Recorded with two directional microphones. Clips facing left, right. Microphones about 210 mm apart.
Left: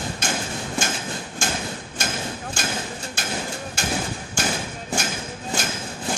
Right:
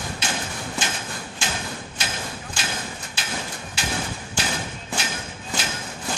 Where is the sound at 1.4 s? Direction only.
45° left (ahead or behind).